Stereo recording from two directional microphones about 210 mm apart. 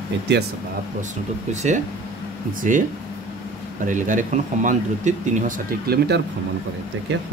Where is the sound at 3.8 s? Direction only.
35° right (ahead or behind).